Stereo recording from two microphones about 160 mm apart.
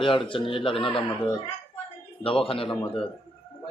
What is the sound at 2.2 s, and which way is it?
Speech, 35° left (ahead or behind).